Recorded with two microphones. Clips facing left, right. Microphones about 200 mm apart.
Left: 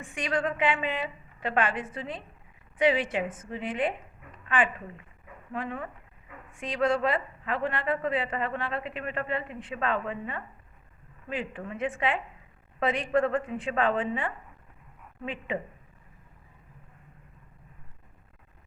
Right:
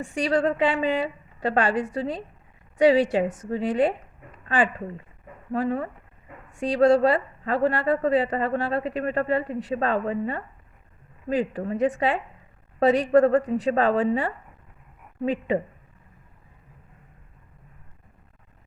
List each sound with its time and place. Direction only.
0.0 s a woman's voice: 35° right (ahead or behind)